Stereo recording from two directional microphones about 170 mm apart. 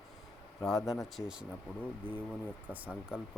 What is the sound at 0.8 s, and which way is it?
Speech, 20° left (ahead or behind).